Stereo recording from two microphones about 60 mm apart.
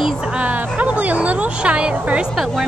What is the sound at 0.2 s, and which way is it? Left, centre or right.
Music, centre.